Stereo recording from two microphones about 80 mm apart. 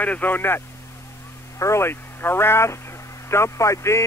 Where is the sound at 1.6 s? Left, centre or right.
Left.